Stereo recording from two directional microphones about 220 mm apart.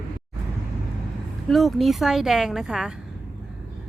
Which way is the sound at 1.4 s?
Centre (ahead or behind).